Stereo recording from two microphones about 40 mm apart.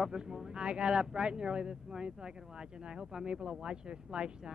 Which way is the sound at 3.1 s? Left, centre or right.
Right.